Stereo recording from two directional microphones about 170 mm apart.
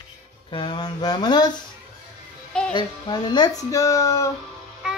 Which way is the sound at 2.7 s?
25° left (ahead or behind).